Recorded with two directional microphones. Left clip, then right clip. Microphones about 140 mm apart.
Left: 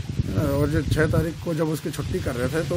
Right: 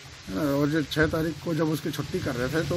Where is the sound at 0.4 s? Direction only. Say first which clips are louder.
Left 1 dB; 15° left (ahead or behind).